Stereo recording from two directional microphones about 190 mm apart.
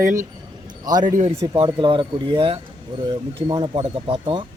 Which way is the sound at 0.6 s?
20° right (ahead or behind).